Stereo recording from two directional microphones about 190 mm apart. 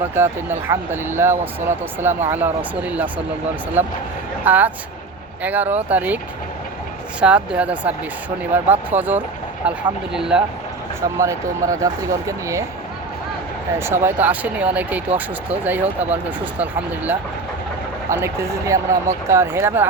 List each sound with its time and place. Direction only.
0.1 s speech: 10° right (ahead or behind)
7.2 s speech: 5° right (ahead or behind)
11.2 s speech: 15° right (ahead or behind)
13.7 s speech: 15° right (ahead or behind)
18.1 s speech: 15° right (ahead or behind)